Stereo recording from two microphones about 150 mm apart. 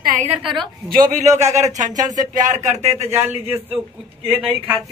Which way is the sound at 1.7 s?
55° right (ahead or behind).